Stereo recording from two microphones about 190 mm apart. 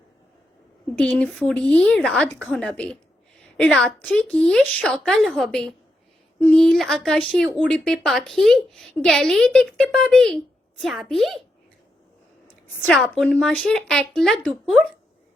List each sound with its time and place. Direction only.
1.0 s speech: 5° left (ahead or behind)
12.6 s speech: 5° left (ahead or behind)